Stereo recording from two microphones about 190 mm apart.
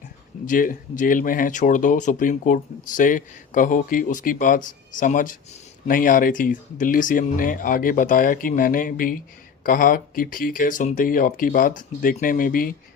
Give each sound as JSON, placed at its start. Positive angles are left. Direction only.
{"t": 0.4, "sound": "speech", "side_deg": 45}